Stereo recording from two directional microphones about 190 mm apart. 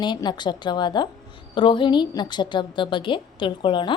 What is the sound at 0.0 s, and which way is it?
A woman's voice, 25° left (ahead or behind).